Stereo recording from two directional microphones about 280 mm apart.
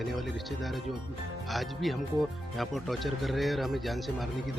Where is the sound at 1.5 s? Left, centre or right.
Centre.